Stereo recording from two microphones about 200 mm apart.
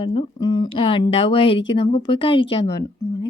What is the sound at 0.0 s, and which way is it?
A woman's voice, 30° left (ahead or behind).